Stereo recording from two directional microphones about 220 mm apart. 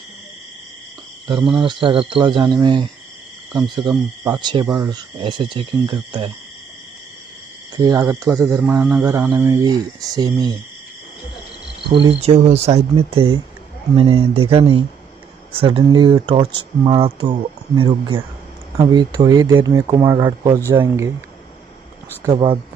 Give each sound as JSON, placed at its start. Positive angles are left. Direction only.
{"t": 1.2, "sound": "speech", "side_deg": -20}
{"t": 7.7, "sound": "speech", "side_deg": -15}
{"t": 12.2, "sound": "speech", "side_deg": -30}
{"t": 22.2, "sound": "speech", "side_deg": -20}